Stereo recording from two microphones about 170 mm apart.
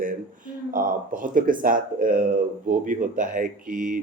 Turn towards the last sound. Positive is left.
turn(degrees=-50)  # may be behind; listen again after turning